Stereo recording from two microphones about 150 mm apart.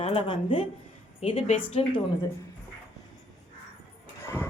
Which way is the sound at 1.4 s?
50° left (ahead or behind).